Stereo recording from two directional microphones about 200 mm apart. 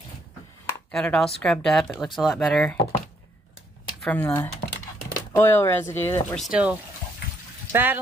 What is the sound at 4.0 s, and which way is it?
Speech, 10° left (ahead or behind).